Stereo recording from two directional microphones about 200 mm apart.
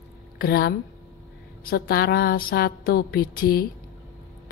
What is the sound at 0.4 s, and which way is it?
Speech, 50° left (ahead or behind).